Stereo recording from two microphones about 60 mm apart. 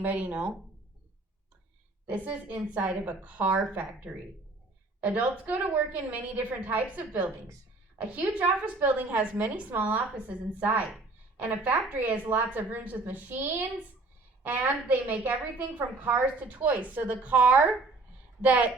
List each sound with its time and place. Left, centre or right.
0.0 s a woman's voice: right
2.0 s a woman's voice: right